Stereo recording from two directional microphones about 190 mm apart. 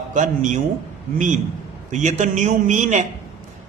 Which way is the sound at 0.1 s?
40° right (ahead or behind).